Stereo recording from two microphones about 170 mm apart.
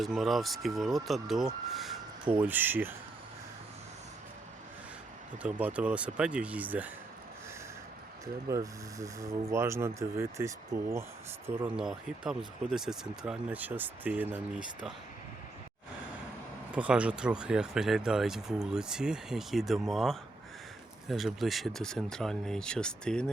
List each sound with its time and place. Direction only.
0.0 s speech: centre (ahead or behind)
5.4 s speech: 10° right (ahead or behind)
8.4 s speech: 20° right (ahead or behind)
16.7 s speech: 5° right (ahead or behind)